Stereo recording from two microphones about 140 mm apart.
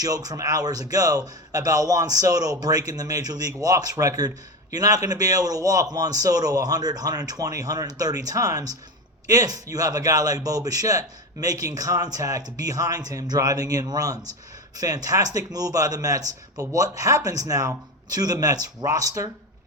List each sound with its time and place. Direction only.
0.0 s a man's voice: 25° right (ahead or behind)